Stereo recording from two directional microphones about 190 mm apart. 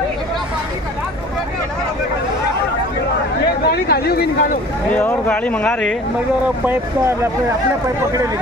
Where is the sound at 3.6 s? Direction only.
55° left (ahead or behind).